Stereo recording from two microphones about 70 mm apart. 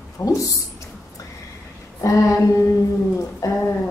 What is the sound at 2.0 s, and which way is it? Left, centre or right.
A woman's voice, left.